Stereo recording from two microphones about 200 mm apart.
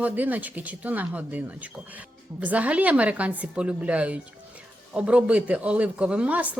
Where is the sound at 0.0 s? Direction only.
10° right (ahead or behind).